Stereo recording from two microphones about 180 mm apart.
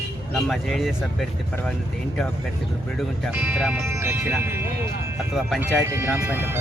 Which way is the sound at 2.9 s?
Centre (ahead or behind).